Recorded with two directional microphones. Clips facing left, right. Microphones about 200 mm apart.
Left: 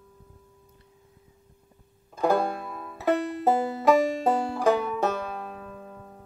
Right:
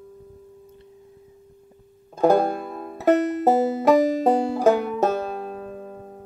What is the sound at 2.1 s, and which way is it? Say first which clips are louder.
Music: right 6 dB; 40° right (ahead or behind).